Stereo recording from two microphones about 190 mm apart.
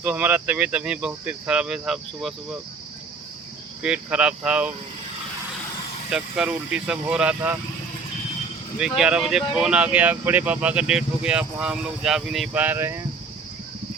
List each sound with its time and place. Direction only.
0.0 s speech: 10° right (ahead or behind)
3.8 s speech: 5° right (ahead or behind)
6.1 s speech: 5° right (ahead or behind)
8.8 s speech: 5° right (ahead or behind)